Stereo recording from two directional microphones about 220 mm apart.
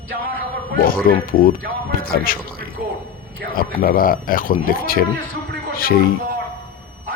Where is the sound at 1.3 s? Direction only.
40° left (ahead or behind).